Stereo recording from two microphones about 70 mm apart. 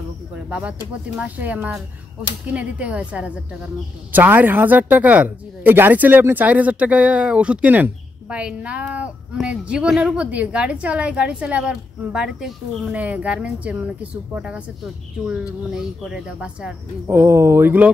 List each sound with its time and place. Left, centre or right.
1.1 s a woman's voice: right
12.9 s a woman's voice: right
17.1 s speech: right